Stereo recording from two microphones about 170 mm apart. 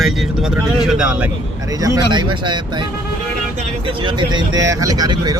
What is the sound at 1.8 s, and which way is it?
Speech, 25° right (ahead or behind).